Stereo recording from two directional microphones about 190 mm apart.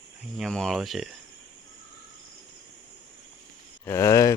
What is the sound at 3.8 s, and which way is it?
Speech, 15° left (ahead or behind).